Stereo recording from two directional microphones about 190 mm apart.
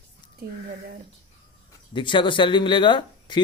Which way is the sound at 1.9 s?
25° left (ahead or behind).